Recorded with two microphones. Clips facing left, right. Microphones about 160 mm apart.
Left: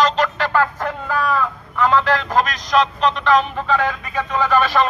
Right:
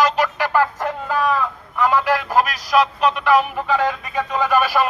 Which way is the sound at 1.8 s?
10° right (ahead or behind).